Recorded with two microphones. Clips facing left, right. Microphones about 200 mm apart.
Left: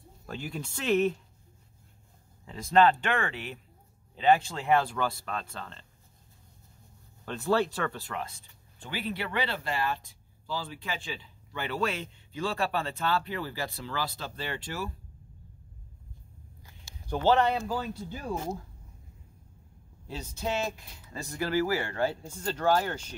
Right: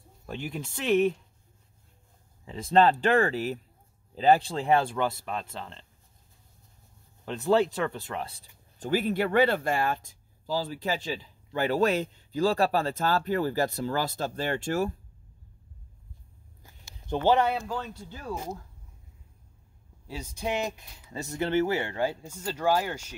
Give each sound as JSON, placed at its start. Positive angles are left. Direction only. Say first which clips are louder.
{"t": 0.3, "sound": "speech", "louder": "right 2 dB", "side_deg": -20}
{"t": 0.8, "sound": "speech", "louder": "right 2 dB", "side_deg": 0}
{"t": 2.4, "sound": "speech", "louder": "right 1 dB", "side_deg": -30}
{"t": 5.2, "sound": "speech", "louder": "right 2 dB", "side_deg": -10}
{"t": 5.5, "sound": "speech", "louder": "right 2 dB", "side_deg": -25}
{"t": 7.2, "sound": "speech", "louder": "right 3 dB", "side_deg": -20}
{"t": 17.0, "sound": "speech", "louder": "right 1 dB", "side_deg": -20}
{"t": 17.6, "sound": "speech", "louder": "left 2 dB", "side_deg": 10}
{"t": 20.1, "sound": "speech", "louder": "right 1 dB", "side_deg": -10}